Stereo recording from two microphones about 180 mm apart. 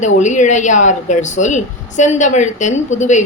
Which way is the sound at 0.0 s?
40° left (ahead or behind).